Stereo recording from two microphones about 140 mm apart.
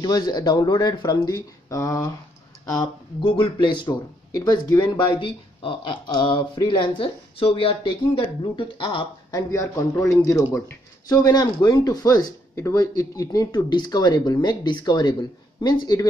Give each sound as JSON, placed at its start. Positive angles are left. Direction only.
{"t": 0.0, "sound": "speech", "side_deg": 30}